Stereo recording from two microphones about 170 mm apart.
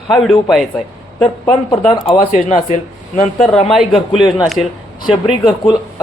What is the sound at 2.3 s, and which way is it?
Speech, 45° left (ahead or behind).